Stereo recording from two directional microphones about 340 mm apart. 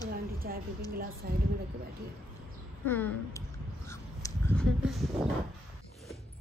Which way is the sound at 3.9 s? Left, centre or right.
Centre.